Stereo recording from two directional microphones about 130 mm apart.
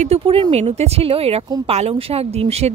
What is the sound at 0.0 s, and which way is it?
Speech, 50° right (ahead or behind).